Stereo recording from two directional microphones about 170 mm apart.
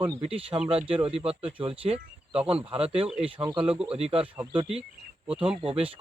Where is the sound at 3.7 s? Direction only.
5° right (ahead or behind).